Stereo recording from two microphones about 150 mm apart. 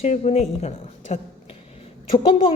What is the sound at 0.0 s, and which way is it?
A woman's voice, 45° left (ahead or behind).